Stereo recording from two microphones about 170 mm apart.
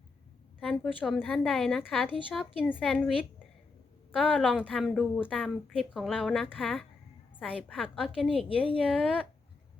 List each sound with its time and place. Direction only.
0.6 s a woman's voice: centre (ahead or behind)